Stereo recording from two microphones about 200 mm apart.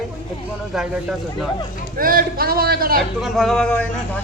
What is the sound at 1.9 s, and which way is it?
A man's voice, 45° right (ahead or behind).